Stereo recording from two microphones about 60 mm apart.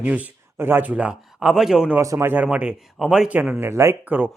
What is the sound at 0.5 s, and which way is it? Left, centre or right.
Speech, right.